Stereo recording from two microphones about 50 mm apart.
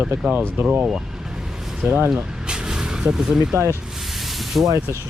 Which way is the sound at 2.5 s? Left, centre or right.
Centre.